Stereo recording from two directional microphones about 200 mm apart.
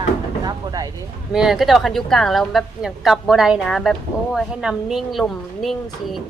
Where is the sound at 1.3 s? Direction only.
Centre (ahead or behind).